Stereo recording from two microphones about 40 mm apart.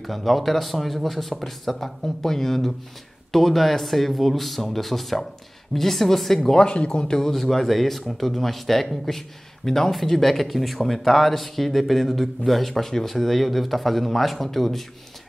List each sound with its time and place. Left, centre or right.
0.0 s speech: centre
6.6 s speech: left
7.2 s speech: centre